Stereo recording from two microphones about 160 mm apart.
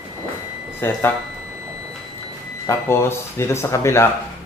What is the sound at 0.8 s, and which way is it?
Speech, 15° left (ahead or behind).